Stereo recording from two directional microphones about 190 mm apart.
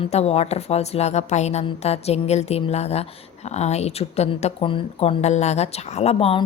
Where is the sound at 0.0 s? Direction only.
35° left (ahead or behind).